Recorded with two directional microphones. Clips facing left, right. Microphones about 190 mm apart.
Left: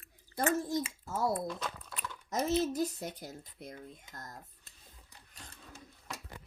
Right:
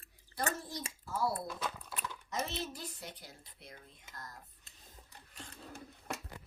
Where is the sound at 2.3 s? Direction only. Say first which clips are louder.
Left 9 dB; 45° left (ahead or behind).